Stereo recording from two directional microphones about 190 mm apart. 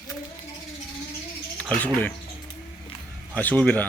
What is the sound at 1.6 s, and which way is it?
Speech, 5° left (ahead or behind).